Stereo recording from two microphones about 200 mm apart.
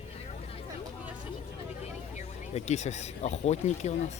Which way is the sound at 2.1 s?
35° left (ahead or behind).